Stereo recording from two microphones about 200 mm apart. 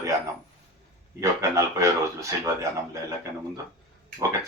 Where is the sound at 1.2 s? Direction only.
15° right (ahead or behind).